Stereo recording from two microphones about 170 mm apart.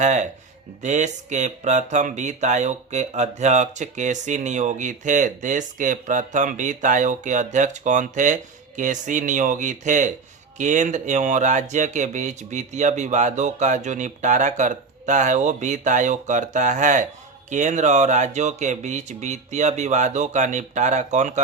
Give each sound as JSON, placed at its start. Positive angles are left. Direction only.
{"t": 0.0, "sound": "speech", "side_deg": -45}